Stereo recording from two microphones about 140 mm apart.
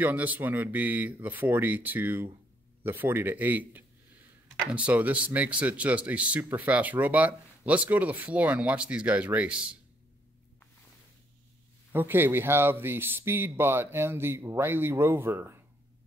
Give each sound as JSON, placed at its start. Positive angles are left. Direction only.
{"t": 0.0, "sound": "speech", "side_deg": -10}
{"t": 11.9, "sound": "speech", "side_deg": -15}